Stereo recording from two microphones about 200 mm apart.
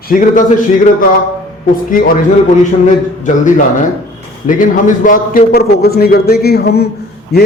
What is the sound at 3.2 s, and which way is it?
A man's voice, 40° left (ahead or behind).